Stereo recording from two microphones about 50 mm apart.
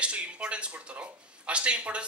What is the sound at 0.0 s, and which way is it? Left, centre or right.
Speech, right.